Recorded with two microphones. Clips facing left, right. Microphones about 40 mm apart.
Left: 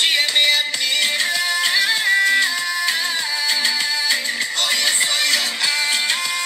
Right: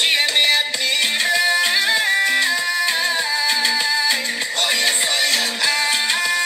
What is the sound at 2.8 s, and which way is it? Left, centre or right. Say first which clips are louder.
Music: right 2 dB; centre.